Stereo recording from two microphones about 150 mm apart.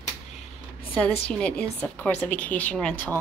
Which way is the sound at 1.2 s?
5° left (ahead or behind).